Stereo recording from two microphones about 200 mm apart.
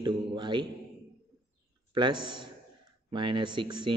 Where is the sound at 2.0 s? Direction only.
25° right (ahead or behind).